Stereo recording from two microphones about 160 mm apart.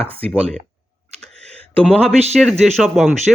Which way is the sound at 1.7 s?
5° left (ahead or behind).